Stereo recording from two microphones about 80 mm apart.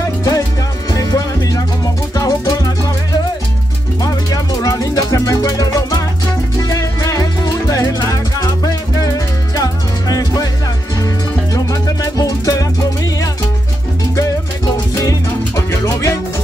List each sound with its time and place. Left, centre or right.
0.2 s music: left
11.5 s music: left
15.0 s music: left